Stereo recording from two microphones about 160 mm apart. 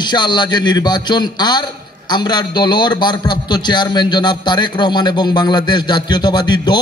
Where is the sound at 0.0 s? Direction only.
30° left (ahead or behind).